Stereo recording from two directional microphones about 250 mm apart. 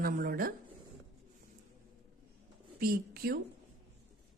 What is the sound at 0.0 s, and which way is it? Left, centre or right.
Speech, right.